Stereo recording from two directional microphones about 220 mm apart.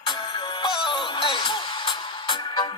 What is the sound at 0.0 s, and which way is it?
Music, 20° left (ahead or behind).